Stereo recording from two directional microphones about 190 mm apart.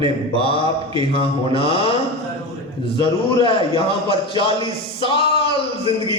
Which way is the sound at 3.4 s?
30° left (ahead or behind).